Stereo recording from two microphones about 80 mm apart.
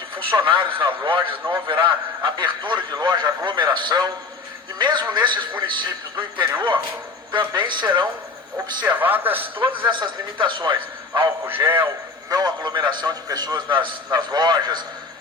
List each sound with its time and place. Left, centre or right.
0.3 s a man's voice: right
1.8 s a man's voice: right
7.3 s a man's voice: right
8.9 s a man's voice: right
9.8 s a man's voice: right
11.4 s a man's voice: right
12.3 s a man's voice: right
14.1 s a man's voice: right